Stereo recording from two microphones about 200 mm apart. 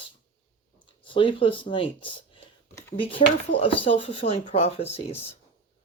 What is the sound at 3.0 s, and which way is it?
Speech, 25° left (ahead or behind).